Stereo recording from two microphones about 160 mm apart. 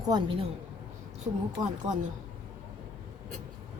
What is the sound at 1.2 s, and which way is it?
Speech, 45° right (ahead or behind).